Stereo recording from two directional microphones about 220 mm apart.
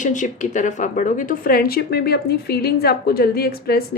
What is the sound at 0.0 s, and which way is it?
A woman's voice, 35° left (ahead or behind).